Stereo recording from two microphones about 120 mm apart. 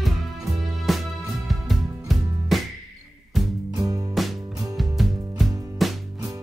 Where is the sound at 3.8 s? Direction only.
30° right (ahead or behind).